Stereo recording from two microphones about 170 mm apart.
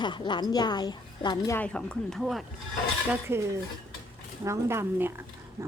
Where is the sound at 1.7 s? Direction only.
5° left (ahead or behind).